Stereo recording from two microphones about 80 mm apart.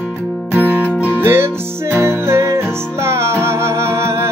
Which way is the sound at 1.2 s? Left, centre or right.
Right.